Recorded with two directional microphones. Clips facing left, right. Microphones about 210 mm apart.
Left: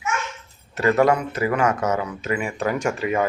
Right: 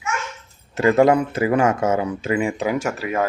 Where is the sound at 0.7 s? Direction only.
25° right (ahead or behind).